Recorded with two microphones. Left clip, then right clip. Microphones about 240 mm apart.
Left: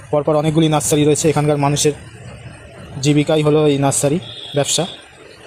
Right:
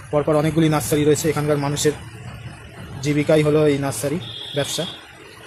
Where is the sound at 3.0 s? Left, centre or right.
Left.